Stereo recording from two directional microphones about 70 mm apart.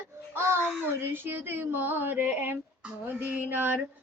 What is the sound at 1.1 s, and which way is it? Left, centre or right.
Female singing, right.